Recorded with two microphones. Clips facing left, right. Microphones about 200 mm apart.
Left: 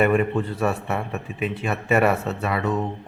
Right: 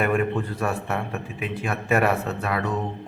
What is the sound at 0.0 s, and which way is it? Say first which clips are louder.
A man's voice: left 3 dB; 5° left (ahead or behind).